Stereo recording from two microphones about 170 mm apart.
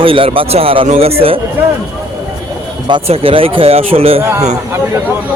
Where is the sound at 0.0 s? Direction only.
30° right (ahead or behind).